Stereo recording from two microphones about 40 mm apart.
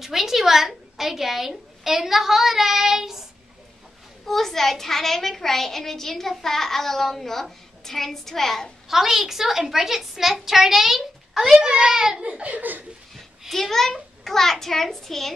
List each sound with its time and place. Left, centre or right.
0.0 s a woman's voice: centre
4.3 s a child's voice: centre
8.8 s a woman's voice: centre
12.2 s speech: right
12.5 s speech: right
13.1 s a sound: centre
14.2 s a child's voice: centre